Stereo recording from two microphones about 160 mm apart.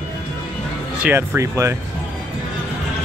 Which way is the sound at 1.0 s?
15° right (ahead or behind).